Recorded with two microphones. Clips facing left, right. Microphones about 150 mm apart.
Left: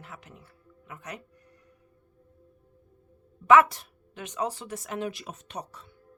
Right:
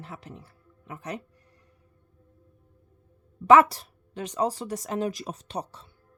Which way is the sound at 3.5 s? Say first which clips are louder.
Right 2 dB; 35° right (ahead or behind).